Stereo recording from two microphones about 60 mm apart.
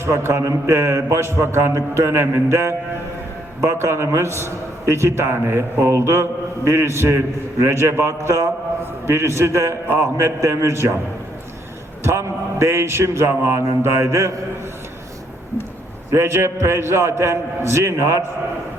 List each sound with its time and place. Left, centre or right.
0.0 s mantra: right
12.0 s mantra: right
16.0 s mantra: right